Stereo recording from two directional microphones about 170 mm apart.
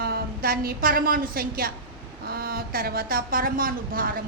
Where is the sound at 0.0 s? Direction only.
60° right (ahead or behind).